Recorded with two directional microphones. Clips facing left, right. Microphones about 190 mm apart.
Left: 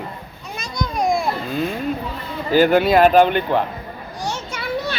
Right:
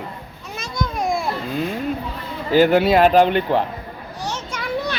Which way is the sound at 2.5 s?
25° right (ahead or behind).